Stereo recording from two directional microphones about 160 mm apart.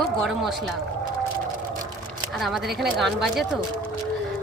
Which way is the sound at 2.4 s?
Centre (ahead or behind).